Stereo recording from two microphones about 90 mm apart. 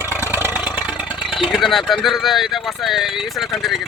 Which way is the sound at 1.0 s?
70° left (ahead or behind).